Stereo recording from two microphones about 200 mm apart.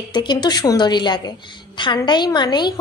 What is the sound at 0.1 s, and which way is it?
A woman's voice, 20° left (ahead or behind).